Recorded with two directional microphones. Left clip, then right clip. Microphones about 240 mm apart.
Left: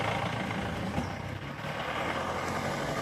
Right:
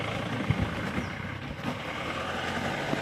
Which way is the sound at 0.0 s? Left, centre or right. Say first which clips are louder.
Left 2 dB; centre.